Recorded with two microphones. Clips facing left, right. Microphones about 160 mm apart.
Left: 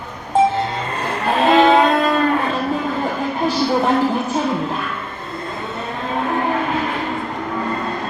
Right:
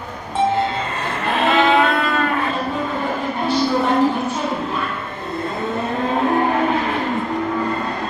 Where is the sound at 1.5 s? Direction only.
40° left (ahead or behind).